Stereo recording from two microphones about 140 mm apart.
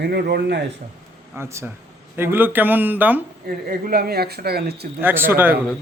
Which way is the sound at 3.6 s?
90° right.